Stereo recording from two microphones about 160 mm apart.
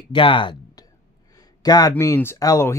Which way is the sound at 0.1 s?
30° left (ahead or behind).